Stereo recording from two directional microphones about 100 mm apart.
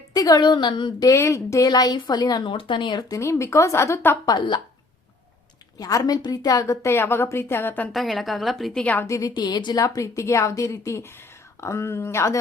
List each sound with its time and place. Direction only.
0.1 s a woman's voice: 40° left (ahead or behind)
1.0 s a woman's voice: 30° left (ahead or behind)
2.5 s a woman's voice: 55° left (ahead or behind)
3.1 s a woman's voice: 30° left (ahead or behind)
4.3 s a woman's voice: 45° left (ahead or behind)
5.7 s a woman's voice: 35° left (ahead or behind); by 7.9 s 20° left (ahead or behind)
7.9 s a woman's voice: centre (ahead or behind)
8.8 s a woman's voice: 15° left (ahead or behind)
9.0 s a woman's voice: 30° left (ahead or behind)
9.3 s a woman's voice: 45° left (ahead or behind); by 12.4 s 30° left (ahead or behind)